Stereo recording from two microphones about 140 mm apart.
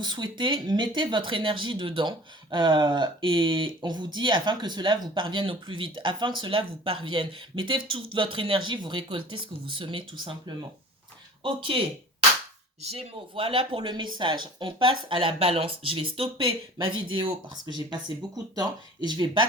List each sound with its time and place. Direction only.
0.0 s speech: 35° right (ahead or behind)
13.0 s speech: 40° right (ahead or behind)